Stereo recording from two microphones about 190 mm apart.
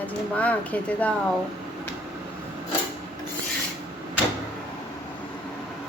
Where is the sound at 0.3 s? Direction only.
5° left (ahead or behind).